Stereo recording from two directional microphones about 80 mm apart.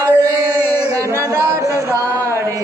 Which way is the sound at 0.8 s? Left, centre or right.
Right.